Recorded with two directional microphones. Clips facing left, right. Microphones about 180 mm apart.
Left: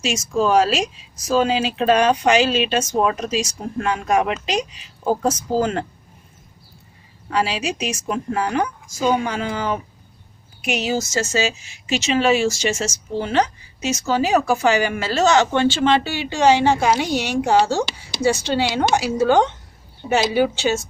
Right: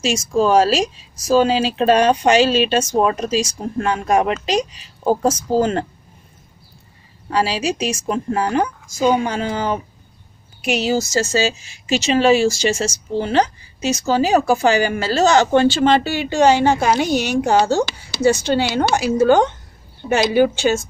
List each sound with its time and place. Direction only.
0.0 s a woman's voice: 30° right (ahead or behind)
7.2 s a woman's voice: 35° right (ahead or behind); by 20.8 s 55° right (ahead or behind)